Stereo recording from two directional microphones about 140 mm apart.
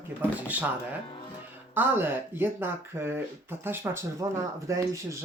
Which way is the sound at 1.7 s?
15° right (ahead or behind).